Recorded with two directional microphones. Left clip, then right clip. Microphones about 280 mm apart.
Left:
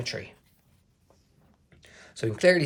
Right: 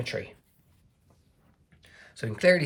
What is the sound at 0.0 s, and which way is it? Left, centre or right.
Speech, centre.